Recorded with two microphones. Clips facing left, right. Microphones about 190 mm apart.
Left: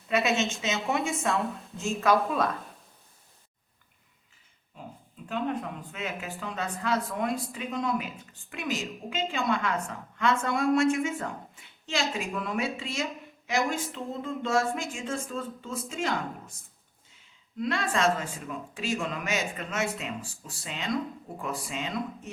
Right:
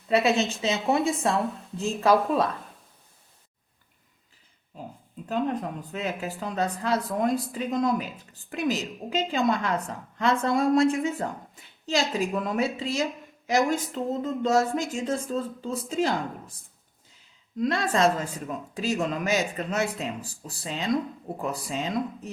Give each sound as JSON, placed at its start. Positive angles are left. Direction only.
{"t": 0.1, "sound": "speech", "side_deg": -35}
{"t": 4.7, "sound": "a sound", "side_deg": -40}
{"t": 5.3, "sound": "speech", "side_deg": -40}
{"t": 17.6, "sound": "speech", "side_deg": -40}